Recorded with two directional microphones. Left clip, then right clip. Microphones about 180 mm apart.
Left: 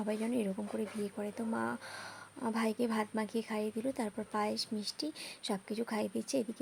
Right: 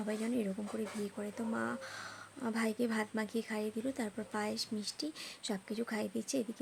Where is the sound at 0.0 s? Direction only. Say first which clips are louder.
Left 2 dB; 10° left (ahead or behind).